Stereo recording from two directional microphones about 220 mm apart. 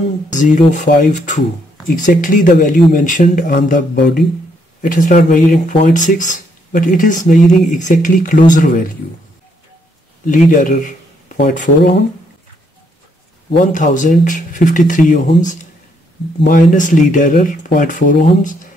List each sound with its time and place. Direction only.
0.3 s speech: 35° left (ahead or behind)
10.2 s speech: 35° left (ahead or behind)
13.5 s speech: 35° left (ahead or behind)
16.4 s speech: 35° left (ahead or behind)